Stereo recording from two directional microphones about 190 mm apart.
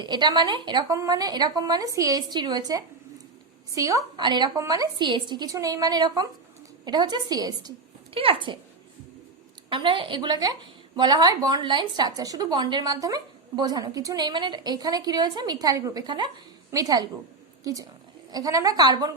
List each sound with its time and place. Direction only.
0.0 s a woman's voice: 25° right (ahead or behind)
9.6 s a woman's voice: 25° right (ahead or behind)